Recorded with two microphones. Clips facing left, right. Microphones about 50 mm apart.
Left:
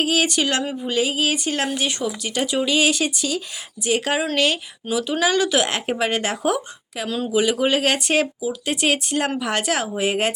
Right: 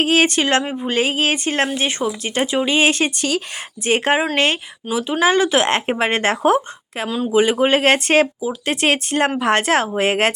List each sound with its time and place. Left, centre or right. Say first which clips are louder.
0.0 s speech: right 4 dB; right
4.9 s speech: right 3 dB; right